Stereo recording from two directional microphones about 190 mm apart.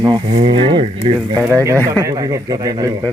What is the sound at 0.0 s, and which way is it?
Speech, 25° right (ahead or behind).